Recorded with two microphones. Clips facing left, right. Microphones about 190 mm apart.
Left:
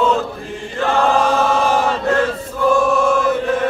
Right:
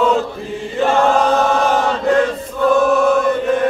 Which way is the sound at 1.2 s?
5° left (ahead or behind).